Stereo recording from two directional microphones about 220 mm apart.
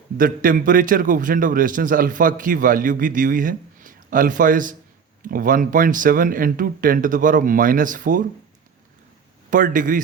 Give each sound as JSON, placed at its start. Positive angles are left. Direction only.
{"t": 0.2, "sound": "a man's voice", "side_deg": -40}
{"t": 9.5, "sound": "a man's voice", "side_deg": -35}